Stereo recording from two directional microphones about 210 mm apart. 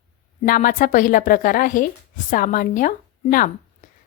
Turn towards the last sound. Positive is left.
turn(degrees=40)  # may be behind; listen again after turning